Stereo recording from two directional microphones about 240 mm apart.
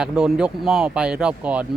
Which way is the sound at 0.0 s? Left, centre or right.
Centre.